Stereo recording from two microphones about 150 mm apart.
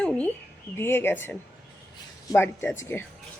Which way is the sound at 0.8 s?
15° left (ahead or behind).